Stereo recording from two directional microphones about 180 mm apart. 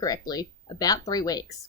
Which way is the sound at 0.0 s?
20° left (ahead or behind).